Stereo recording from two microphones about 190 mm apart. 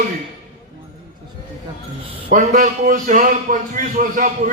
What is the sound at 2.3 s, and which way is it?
A man's voice, 45° right (ahead or behind).